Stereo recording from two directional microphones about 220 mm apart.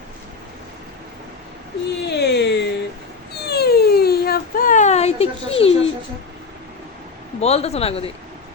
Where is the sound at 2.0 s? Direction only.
50° left (ahead or behind).